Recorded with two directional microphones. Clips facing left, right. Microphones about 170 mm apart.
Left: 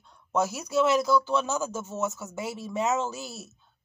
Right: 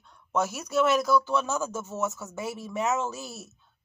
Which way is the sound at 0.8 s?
Centre (ahead or behind).